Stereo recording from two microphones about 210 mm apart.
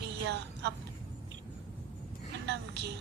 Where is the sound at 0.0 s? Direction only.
55° right (ahead or behind).